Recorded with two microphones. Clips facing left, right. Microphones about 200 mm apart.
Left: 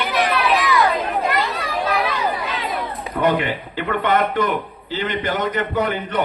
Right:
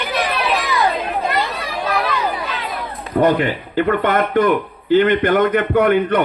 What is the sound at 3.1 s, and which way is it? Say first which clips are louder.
A man's voice: right 4 dB; 45° right (ahead or behind).